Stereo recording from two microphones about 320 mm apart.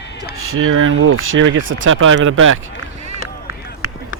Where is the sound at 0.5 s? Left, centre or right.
Right.